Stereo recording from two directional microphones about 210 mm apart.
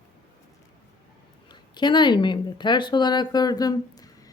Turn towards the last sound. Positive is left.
turn(degrees=15)  # may be behind; listen again after turning